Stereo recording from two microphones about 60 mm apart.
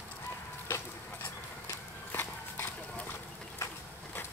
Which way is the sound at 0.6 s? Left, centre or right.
Left.